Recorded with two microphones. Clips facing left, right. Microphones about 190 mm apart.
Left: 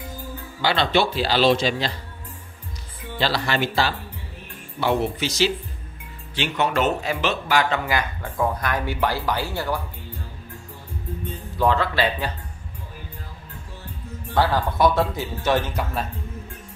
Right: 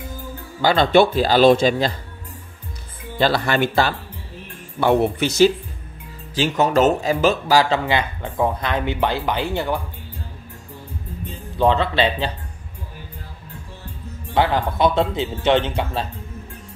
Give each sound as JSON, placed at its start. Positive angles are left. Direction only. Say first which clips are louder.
{"t": 0.6, "sound": "speech", "louder": "right 6 dB", "side_deg": -45}
{"t": 3.2, "sound": "speech", "louder": "right 5 dB", "side_deg": -50}
{"t": 6.3, "sound": "speech", "louder": "right 5 dB", "side_deg": -40}
{"t": 7.8, "sound": "speech", "louder": "right 3 dB", "side_deg": -20}
{"t": 11.5, "sound": "speech", "louder": "right 3 dB", "side_deg": -20}
{"t": 14.3, "sound": "speech", "louder": "right 2 dB", "side_deg": -20}